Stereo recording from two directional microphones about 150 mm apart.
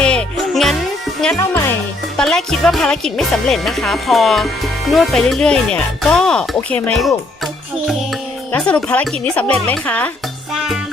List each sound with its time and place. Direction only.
0.0 s music: 5° left (ahead or behind)
1.4 s music: 15° left (ahead or behind)
2.1 s speech: 5° left (ahead or behind)
8.5 s speech: 5° left (ahead or behind)
10.5 s music: 5° right (ahead or behind)